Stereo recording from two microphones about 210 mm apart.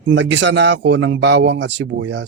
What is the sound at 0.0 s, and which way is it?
A man's voice, 60° right (ahead or behind).